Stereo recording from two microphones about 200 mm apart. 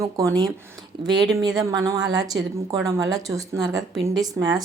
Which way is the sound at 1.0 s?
20° right (ahead or behind).